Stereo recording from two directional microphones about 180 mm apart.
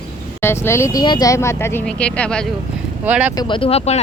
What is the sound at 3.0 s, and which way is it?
Speech, 5° right (ahead or behind).